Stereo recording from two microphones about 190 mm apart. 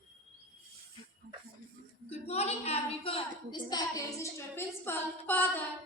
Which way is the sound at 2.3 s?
35° left (ahead or behind).